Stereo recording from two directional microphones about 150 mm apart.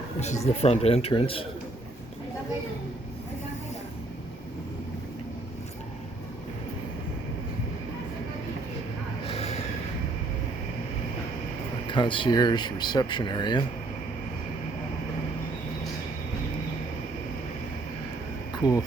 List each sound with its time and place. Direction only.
0.2 s speech: 50° left (ahead or behind)
9.2 s a sound: 40° left (ahead or behind)
11.9 s speech: 35° left (ahead or behind)
18.5 s speech: 25° left (ahead or behind)